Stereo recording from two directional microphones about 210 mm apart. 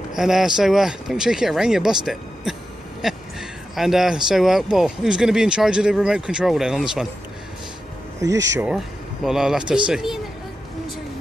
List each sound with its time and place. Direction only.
0.1 s speech: centre (ahead or behind)
8.2 s speech: 15° right (ahead or behind)
8.6 s speech: centre (ahead or behind)